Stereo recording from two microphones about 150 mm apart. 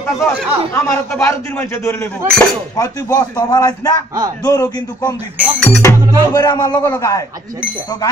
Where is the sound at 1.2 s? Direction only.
15° left (ahead or behind).